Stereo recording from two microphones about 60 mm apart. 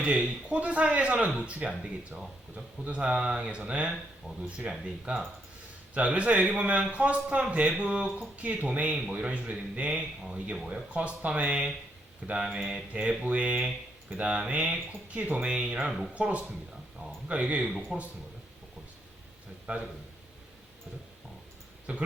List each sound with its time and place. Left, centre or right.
0.0 s speech: right
2.1 s speech: centre
2.8 s speech: right
12.5 s speech: centre
12.9 s speech: right
15.9 s speech: centre
16.1 s speech: right
19.6 s a man's voice: centre
21.9 s speech: right